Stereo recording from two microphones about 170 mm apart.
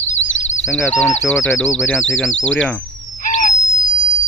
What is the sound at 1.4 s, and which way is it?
Speech, 5° left (ahead or behind).